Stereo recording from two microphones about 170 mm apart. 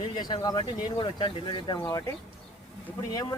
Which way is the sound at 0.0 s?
25° left (ahead or behind).